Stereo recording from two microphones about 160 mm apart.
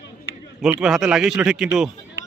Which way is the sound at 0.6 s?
Centre (ahead or behind).